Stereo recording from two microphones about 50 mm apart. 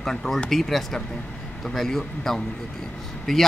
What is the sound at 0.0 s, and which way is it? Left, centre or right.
A man's voice, centre.